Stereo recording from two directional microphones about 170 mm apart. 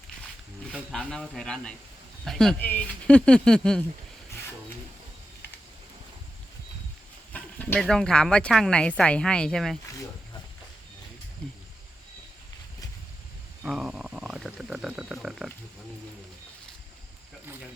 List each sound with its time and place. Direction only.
0.7 s speech: 5° left (ahead or behind)
7.3 s speech: 10° left (ahead or behind)
11.4 s a sound: 5° left (ahead or behind)
13.6 s wild animals: 5° right (ahead or behind)